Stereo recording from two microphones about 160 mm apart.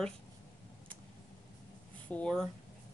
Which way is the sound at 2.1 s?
5° left (ahead or behind).